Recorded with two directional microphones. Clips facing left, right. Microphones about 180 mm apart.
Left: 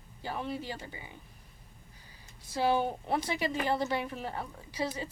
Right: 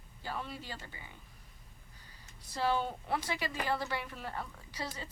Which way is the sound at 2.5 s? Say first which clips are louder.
Left 4 dB; 15° left (ahead or behind).